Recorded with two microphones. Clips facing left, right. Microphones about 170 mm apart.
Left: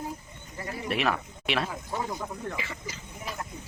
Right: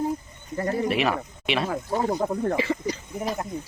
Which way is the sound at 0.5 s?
50° right (ahead or behind).